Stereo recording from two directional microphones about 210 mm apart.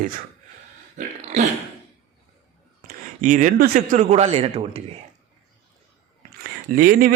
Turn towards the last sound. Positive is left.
turn(degrees=-40)  # may be behind; listen again after turning